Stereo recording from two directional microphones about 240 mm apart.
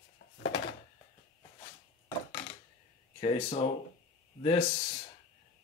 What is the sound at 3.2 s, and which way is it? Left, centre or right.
Speech, left.